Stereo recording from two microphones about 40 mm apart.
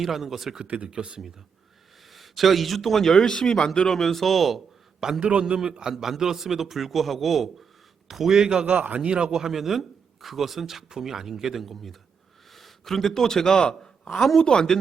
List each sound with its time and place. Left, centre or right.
0.0 s a man's voice: centre
0.6 s a man's voice: right
2.1 s a man's voice: centre
4.9 s a man's voice: centre
5.2 s a man's voice: right
8.6 s a man's voice: right
9.0 s a man's voice: right
9.4 s a man's voice: centre